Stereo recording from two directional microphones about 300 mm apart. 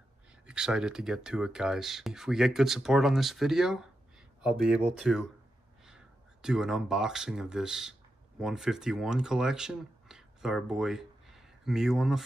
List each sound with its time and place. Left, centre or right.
0.5 s speech: centre